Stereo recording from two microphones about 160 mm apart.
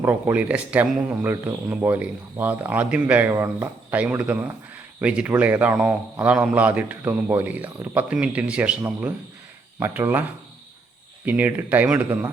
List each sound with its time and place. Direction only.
0.0 s speech: 10° right (ahead or behind)
11.3 s speech: 10° right (ahead or behind)